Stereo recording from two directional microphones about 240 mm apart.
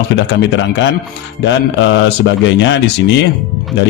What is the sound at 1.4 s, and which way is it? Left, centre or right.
Speech, left.